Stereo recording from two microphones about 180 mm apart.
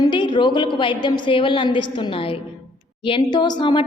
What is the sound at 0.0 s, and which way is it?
A woman's voice, 25° left (ahead or behind).